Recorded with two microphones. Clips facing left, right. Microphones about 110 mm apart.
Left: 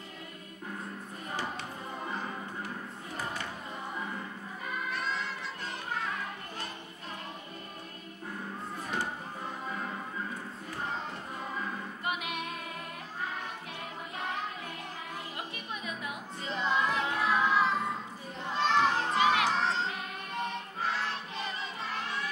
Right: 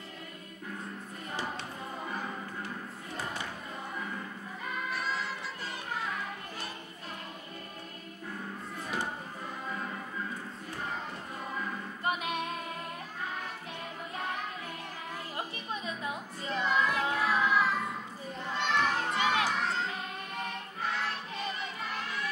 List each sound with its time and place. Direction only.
4.9 s music: 5° right (ahead or behind)
12.0 s music: 40° right (ahead or behind)
15.3 s music: 30° right (ahead or behind)
16.4 s child singing: 20° left (ahead or behind)
17.1 s music: 25° left (ahead or behind)
18.6 s children playing: 30° left (ahead or behind)
19.5 s crowd: 30° left (ahead or behind)